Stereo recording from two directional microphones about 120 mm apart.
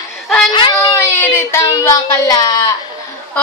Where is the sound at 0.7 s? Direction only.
30° left (ahead or behind).